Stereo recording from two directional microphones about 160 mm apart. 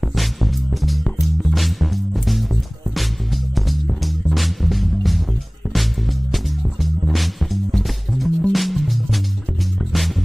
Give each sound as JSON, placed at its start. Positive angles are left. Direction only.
{"t": 0.0, "sound": "music", "side_deg": 0}
{"t": 6.3, "sound": "music", "side_deg": 0}